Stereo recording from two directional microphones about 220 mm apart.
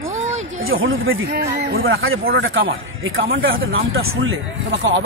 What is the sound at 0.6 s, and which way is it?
Speech, 65° right (ahead or behind).